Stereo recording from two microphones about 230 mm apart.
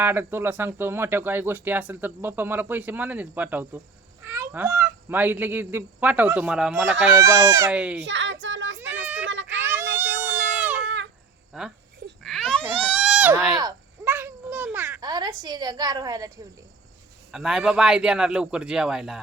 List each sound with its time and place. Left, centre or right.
0.0 s speech: centre
7.9 s a sound: right
9.6 s a sound: centre
10.8 s a sound: right
11.5 s a man's voice: centre
12.2 s baby cry: centre
12.8 s goat: centre
13.6 s babbling: centre
17.3 s a man's voice: centre